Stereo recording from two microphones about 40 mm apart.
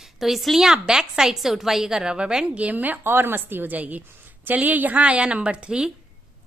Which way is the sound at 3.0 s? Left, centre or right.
Right.